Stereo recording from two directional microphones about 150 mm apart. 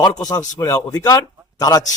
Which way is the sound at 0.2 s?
25° left (ahead or behind).